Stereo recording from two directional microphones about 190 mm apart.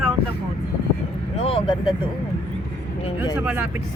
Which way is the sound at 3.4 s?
10° right (ahead or behind).